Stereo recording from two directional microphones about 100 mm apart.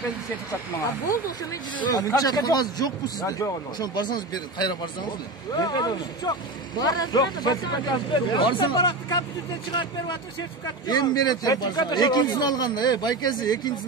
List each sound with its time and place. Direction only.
1.8 s speech: 40° left (ahead or behind)